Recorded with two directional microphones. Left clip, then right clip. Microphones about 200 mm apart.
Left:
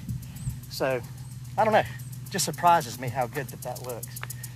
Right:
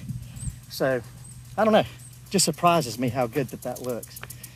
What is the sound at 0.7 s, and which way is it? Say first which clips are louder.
Speech: right 3 dB; 15° left (ahead or behind).